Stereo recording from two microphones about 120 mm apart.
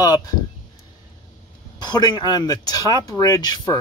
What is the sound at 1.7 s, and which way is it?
Speech, 35° left (ahead or behind).